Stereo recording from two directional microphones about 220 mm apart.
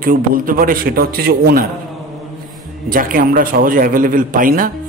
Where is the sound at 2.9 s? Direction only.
40° right (ahead or behind).